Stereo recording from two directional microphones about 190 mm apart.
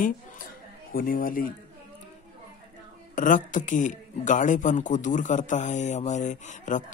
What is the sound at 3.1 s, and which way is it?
A man's voice, 40° left (ahead or behind).